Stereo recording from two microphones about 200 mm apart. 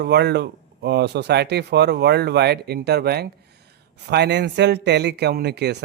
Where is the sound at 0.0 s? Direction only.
55° right (ahead or behind).